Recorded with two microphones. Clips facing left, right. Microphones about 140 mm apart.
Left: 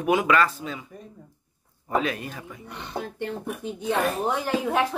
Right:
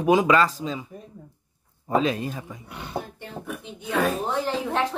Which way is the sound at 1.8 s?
25° right (ahead or behind).